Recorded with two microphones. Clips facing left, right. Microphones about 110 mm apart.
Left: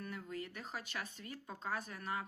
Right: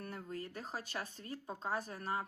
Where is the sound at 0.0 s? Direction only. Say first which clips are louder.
Right 1 dB; 35° right (ahead or behind).